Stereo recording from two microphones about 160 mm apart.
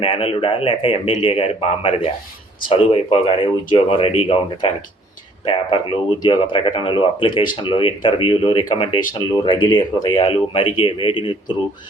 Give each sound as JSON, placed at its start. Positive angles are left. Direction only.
{"t": 0.0, "sound": "speech", "side_deg": 35}